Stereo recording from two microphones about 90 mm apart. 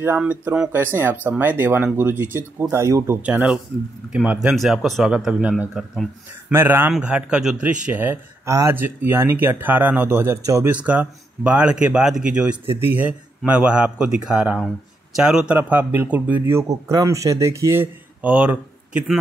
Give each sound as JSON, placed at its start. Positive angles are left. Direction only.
{"t": 0.2, "sound": "speech", "side_deg": -15}
{"t": 2.6, "sound": "speech", "side_deg": -35}
{"t": 3.2, "sound": "speech", "side_deg": -15}
{"t": 4.6, "sound": "speech", "side_deg": 0}
{"t": 6.5, "sound": "speech", "side_deg": -25}
{"t": 7.0, "sound": "speech", "side_deg": -10}
{"t": 8.5, "sound": "speech", "side_deg": -35}
{"t": 8.7, "sound": "speech", "side_deg": -20}
{"t": 10.4, "sound": "speech", "side_deg": -35}
{"t": 10.7, "sound": "speech", "side_deg": -15}
{"t": 12.6, "sound": "speech", "side_deg": -20}
{"t": 15.5, "sound": "speech", "side_deg": -20}
{"t": 16.6, "sound": "speech", "side_deg": -40}
{"t": 18.2, "sound": "speech", "side_deg": -15}